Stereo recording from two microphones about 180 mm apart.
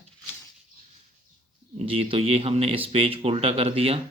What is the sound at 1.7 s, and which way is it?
Speech, 30° right (ahead or behind).